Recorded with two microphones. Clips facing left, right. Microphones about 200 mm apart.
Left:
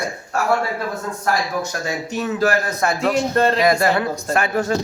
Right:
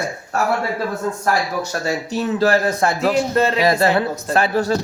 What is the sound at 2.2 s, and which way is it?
Speech, 30° right (ahead or behind).